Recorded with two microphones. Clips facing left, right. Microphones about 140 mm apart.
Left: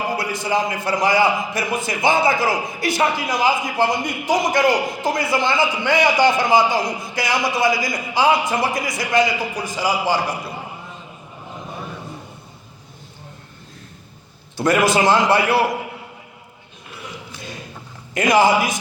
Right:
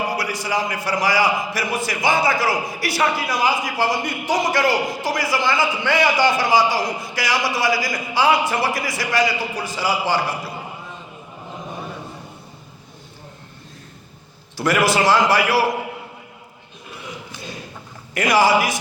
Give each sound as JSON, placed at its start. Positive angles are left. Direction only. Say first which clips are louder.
{"t": 0.2, "sound": "a man's voice", "louder": "left 2 dB", "side_deg": 25}
{"t": 14.6, "sound": "a man's voice", "louder": "left 2 dB", "side_deg": 20}
{"t": 18.1, "sound": "a man's voice", "louder": "left 1 dB", "side_deg": 20}